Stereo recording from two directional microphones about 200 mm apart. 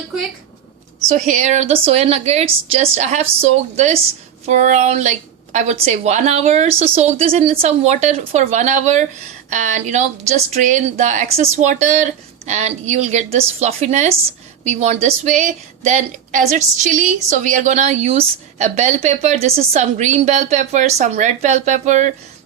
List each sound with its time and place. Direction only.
1.0 s speech: 35° right (ahead or behind)